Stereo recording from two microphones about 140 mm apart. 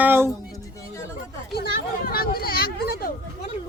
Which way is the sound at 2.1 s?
90° left.